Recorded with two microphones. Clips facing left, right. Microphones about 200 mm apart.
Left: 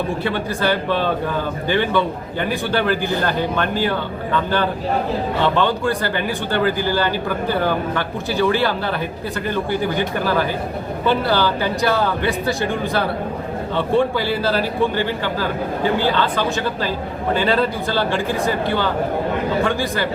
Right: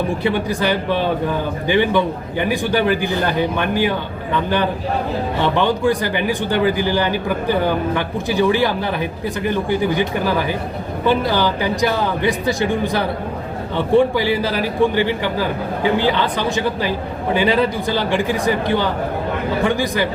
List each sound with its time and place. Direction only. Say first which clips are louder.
0.2 s speech: right 2 dB; 15° right (ahead or behind)
11.0 s speech: right 1 dB; 15° right (ahead or behind)